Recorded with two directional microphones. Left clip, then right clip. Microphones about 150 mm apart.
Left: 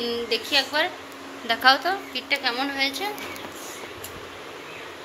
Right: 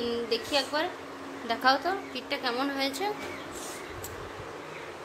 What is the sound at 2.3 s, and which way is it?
Speech, 20° right (ahead or behind).